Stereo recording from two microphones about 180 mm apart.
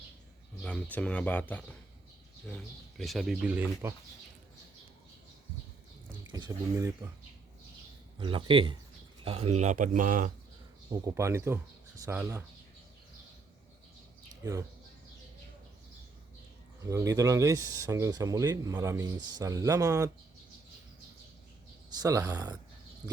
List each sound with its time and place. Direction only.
0.6 s speech: 10° left (ahead or behind); by 3.9 s 10° right (ahead or behind)
6.3 s speech: 20° right (ahead or behind)
8.2 s speech: 30° right (ahead or behind); by 10.3 s 45° right (ahead or behind)
10.9 s speech: 15° right (ahead or behind)
16.8 s speech: 15° right (ahead or behind)
21.8 s a man's voice: 20° right (ahead or behind)